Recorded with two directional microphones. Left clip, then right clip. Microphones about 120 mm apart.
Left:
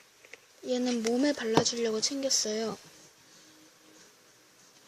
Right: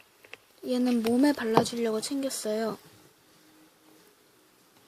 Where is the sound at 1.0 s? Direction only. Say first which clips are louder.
Right 3 dB; 30° right (ahead or behind).